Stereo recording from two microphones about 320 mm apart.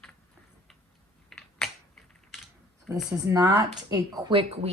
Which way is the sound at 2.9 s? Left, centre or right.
Centre.